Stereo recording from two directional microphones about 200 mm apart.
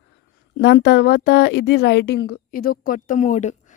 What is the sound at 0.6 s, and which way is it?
Speech, 60° left (ahead or behind).